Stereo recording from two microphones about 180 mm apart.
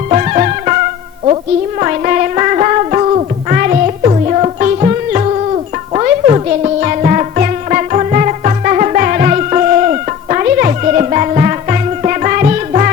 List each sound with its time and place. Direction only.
0.1 s music: 40° right (ahead or behind)
1.8 s music: 45° right (ahead or behind)
3.5 s music: 50° right (ahead or behind)
4.0 s music: 35° right (ahead or behind)